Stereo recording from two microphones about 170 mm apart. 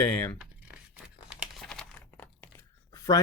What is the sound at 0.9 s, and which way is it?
Crumpling, 5° right (ahead or behind).